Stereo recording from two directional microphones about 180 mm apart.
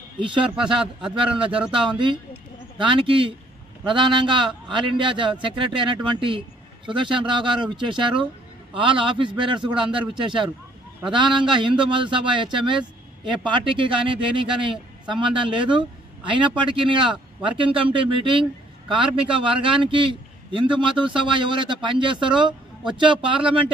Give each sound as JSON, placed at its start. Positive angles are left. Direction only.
{"t": 0.2, "sound": "a man's voice", "side_deg": -25}
{"t": 11.2, "sound": "speech", "side_deg": -5}
{"t": 11.8, "sound": "a man's voice", "side_deg": -25}